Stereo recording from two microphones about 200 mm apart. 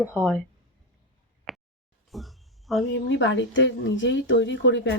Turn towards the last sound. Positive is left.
turn(degrees=65)  # may be behind; listen again after turning